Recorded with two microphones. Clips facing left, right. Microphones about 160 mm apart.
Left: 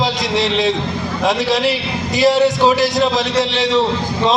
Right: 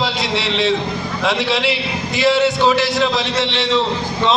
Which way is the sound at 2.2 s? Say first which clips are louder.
Left 2 dB; 40° left (ahead or behind).